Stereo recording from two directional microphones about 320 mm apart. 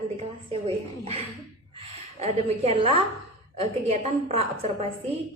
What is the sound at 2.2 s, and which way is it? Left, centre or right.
Speech, centre.